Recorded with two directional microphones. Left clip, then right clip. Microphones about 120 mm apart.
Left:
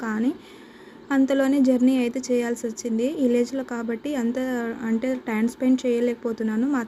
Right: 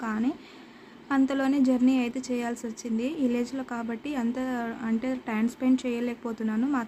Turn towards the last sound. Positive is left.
turn(degrees=15)  # may be behind; listen again after turning